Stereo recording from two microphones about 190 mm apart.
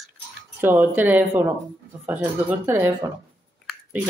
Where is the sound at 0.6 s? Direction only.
10° right (ahead or behind).